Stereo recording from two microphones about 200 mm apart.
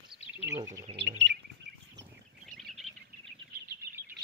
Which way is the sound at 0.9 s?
60° right (ahead or behind).